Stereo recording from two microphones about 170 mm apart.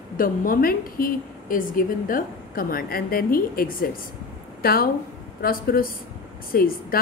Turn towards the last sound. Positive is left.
turn(degrees=60)  # may be behind; listen again after turning